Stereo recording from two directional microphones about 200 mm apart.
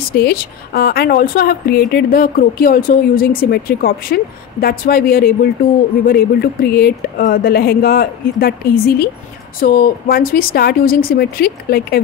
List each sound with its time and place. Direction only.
0.1 s a woman's voice: 50° left (ahead or behind)